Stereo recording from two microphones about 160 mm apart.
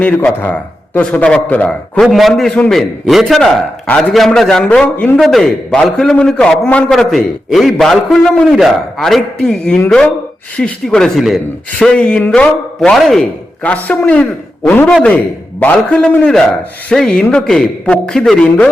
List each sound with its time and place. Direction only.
0.0 s a man's voice: 10° left (ahead or behind)